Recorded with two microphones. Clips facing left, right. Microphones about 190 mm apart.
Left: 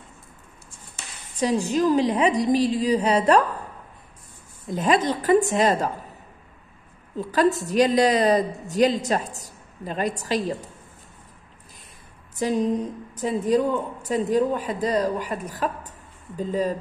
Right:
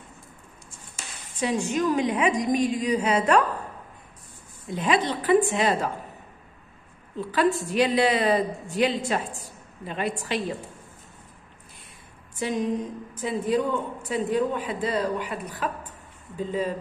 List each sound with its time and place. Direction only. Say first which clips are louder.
0.9 s a woman's voice: left 4 dB; 35° left (ahead or behind)
4.6 s a woman's voice: left 3 dB; 45° left (ahead or behind)
7.2 s a woman's voice: left 2 dB; 40° left (ahead or behind)
12.4 s a woman's voice: left 4 dB; 35° left (ahead or behind)